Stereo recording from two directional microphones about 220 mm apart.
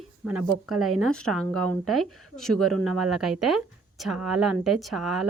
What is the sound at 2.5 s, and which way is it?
Speech, 90° right.